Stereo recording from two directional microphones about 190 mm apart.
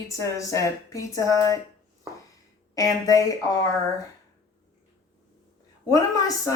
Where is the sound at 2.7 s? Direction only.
20° left (ahead or behind).